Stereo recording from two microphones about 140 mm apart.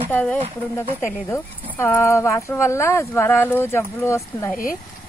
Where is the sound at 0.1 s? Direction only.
10° left (ahead or behind).